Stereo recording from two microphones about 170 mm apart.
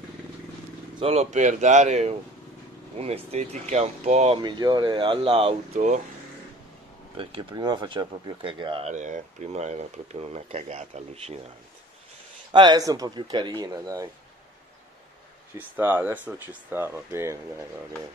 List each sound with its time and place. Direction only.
0.9 s speech: 35° right (ahead or behind)
4.4 s speech: 25° right (ahead or behind); by 6.0 s 45° right (ahead or behind)
7.2 s speech: 30° right (ahead or behind)
8.9 s speech: 45° right (ahead or behind)
12.5 s speech: 25° right (ahead or behind)
15.5 s speech: 10° right (ahead or behind)